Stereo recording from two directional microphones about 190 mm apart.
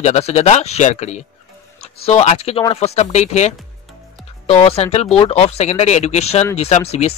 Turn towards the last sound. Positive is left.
turn(degrees=35)  # may be behind; listen again after turning